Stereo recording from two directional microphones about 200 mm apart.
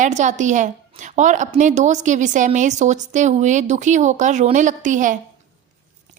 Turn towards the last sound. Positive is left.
turn(degrees=-40)  # may be behind; listen again after turning